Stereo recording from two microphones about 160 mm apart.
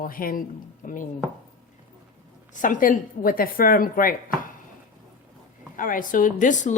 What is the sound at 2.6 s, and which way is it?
Speech, 55° left (ahead or behind).